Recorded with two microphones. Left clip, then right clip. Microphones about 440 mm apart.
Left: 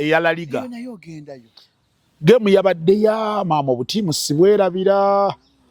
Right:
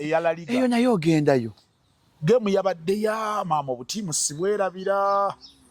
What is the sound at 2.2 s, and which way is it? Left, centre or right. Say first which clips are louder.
A man's voice: left 7 dB; left.